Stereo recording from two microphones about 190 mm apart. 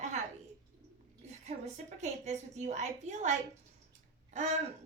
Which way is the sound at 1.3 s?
35° right (ahead or behind).